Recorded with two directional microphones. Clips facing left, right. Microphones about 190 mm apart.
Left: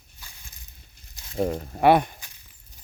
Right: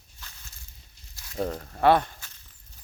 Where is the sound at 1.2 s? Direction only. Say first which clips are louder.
Left 4 dB; 20° left (ahead or behind).